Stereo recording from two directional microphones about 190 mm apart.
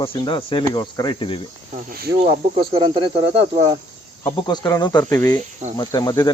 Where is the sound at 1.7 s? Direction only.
50° right (ahead or behind).